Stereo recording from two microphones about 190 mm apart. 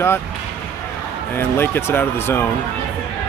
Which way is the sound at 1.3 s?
10° left (ahead or behind).